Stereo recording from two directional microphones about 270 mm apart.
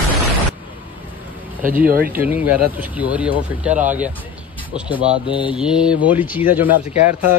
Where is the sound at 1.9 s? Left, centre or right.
Right.